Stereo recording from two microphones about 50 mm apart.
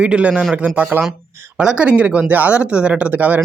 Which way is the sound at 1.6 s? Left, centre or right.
Right.